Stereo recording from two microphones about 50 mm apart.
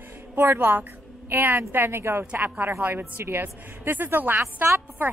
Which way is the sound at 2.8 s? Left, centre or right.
Right.